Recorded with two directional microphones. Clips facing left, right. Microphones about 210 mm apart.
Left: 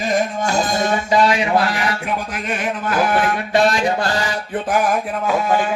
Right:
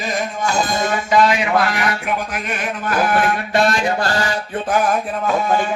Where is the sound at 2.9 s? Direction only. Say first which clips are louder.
Right 1 dB; 20° left (ahead or behind).